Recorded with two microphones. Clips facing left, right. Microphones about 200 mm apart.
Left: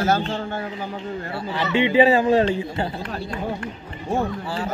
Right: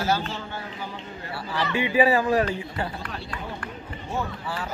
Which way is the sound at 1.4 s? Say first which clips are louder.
Left 5 dB; 25° left (ahead or behind).